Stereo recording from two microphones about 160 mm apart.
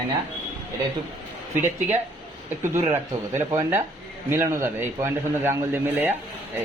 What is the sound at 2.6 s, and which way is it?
A man's voice, 15° right (ahead or behind).